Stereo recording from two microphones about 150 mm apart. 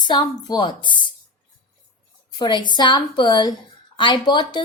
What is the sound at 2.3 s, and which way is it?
A woman's voice, 30° left (ahead or behind).